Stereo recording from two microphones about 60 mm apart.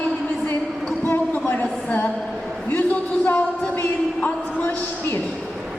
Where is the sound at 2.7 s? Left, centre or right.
Left.